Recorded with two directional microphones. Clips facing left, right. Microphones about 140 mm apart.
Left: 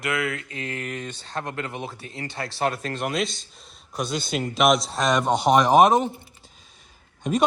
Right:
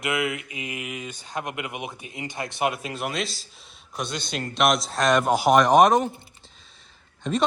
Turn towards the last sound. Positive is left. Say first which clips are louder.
# left 2 dB
turn(degrees=15)  # may be behind; listen again after turning